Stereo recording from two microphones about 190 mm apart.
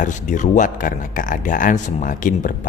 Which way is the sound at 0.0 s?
40° left (ahead or behind).